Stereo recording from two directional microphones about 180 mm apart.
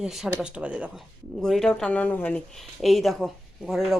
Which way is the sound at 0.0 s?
Centre (ahead or behind).